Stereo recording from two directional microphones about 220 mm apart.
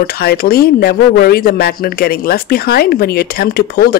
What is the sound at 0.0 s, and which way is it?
Speech, 45° left (ahead or behind).